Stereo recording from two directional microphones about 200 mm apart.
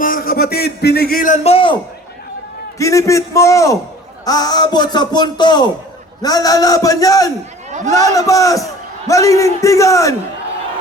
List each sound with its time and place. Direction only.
0.0 s a man's voice: 45° left (ahead or behind); by 1.7 s 30° left (ahead or behind)
2.7 s a man's voice: 15° left (ahead or behind)